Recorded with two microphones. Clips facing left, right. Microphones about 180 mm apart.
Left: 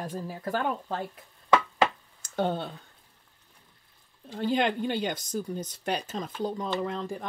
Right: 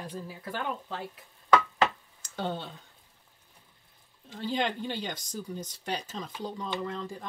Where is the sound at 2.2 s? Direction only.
50° left (ahead or behind).